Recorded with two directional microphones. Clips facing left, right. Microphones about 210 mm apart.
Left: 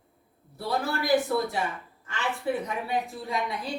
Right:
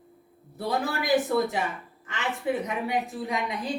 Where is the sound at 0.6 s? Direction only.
20° right (ahead or behind).